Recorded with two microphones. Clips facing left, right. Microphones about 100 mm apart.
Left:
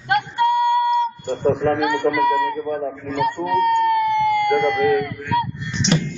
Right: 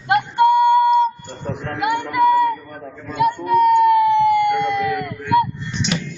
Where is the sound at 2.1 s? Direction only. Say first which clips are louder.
Right 5 dB; 5° right (ahead or behind).